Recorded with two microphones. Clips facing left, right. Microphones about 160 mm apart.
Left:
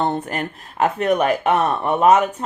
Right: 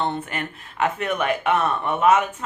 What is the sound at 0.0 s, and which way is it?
Speech, 40° left (ahead or behind).